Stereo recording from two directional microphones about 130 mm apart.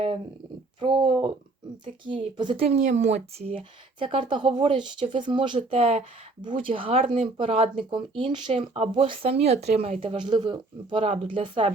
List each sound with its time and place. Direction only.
0.8 s a sound: 40° right (ahead or behind)
1.8 s speech: 40° right (ahead or behind)
10.0 s speech: 40° right (ahead or behind)
11.0 s speech: 55° right (ahead or behind)